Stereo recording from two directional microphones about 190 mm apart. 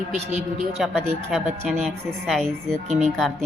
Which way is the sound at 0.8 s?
Centre (ahead or behind).